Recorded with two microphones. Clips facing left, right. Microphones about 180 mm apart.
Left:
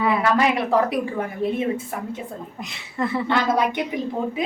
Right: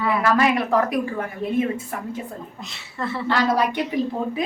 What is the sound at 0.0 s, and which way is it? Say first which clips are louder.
A woman's voice: even; 20° left (ahead or behind).